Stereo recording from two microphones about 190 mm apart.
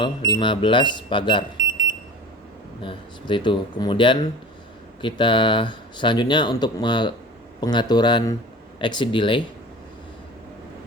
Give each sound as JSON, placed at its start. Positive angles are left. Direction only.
{"t": 0.0, "sound": "speech", "side_deg": 25}
{"t": 2.8, "sound": "speech", "side_deg": 25}